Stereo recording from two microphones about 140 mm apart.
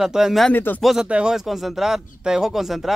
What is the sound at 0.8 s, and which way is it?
Speech, 5° right (ahead or behind).